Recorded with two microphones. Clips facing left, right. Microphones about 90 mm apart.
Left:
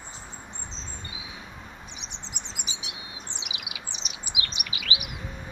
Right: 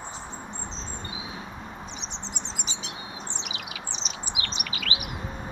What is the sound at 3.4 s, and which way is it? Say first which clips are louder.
Bird: right 4 dB; 10° left (ahead or behind).